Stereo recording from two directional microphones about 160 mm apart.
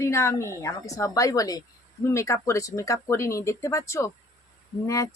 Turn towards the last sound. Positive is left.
turn(degrees=20)  # may be behind; listen again after turning